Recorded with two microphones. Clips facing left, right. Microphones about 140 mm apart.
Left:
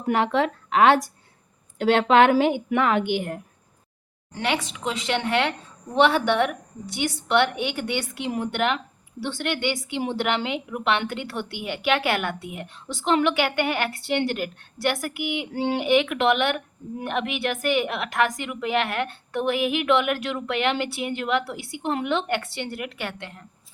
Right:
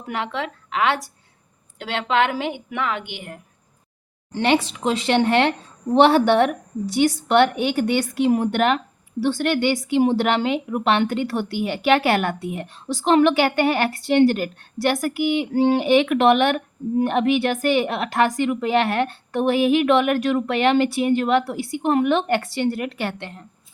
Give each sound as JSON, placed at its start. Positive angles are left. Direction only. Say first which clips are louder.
{"t": 0.1, "sound": "a woman's voice", "louder": "left 5 dB", "side_deg": 45}
{"t": 4.3, "sound": "speech", "louder": "right 7 dB", "side_deg": -30}